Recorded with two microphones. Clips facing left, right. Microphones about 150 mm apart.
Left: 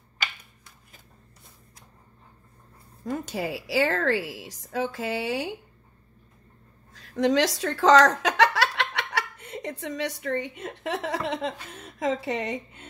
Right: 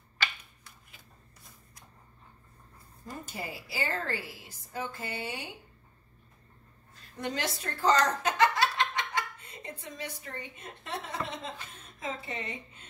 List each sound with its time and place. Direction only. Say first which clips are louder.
3.1 s a woman's voice: left 10 dB; 90° left
6.9 s speech: left 13 dB; 90° left